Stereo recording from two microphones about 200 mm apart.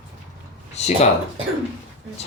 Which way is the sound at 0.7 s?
35° left (ahead or behind).